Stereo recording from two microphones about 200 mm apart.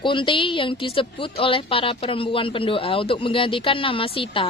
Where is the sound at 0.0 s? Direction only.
25° left (ahead or behind).